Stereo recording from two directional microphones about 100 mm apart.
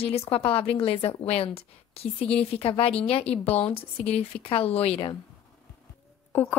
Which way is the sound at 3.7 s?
85° left.